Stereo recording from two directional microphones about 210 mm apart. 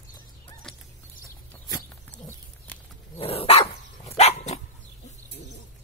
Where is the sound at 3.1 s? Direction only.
30° left (ahead or behind).